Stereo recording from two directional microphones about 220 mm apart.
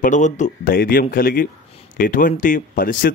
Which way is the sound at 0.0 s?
35° left (ahead or behind).